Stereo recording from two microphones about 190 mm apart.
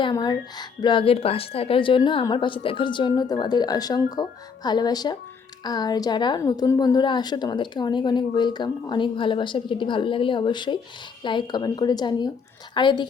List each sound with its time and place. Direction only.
0.0 s speech: 20° left (ahead or behind)